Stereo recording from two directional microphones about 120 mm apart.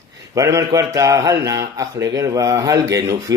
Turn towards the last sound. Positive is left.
turn(degrees=-30)  # may be behind; listen again after turning